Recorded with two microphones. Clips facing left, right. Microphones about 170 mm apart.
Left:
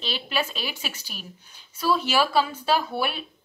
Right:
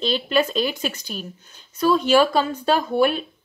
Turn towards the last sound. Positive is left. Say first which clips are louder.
# right 6 dB
turn(degrees=5)  # may be behind; listen again after turning